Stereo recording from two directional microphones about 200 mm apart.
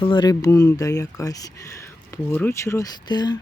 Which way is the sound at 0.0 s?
25° left (ahead or behind).